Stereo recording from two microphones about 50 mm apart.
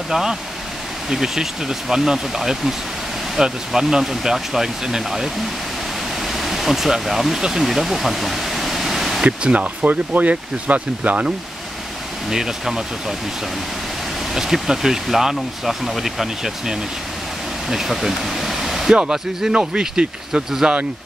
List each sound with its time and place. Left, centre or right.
0.1 s speech: centre
7.6 s pink noise: centre
9.2 s speech: right
12.3 s speech: centre
14.3 s speech: centre